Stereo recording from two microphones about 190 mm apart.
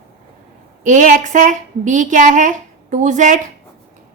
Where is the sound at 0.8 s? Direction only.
40° right (ahead or behind).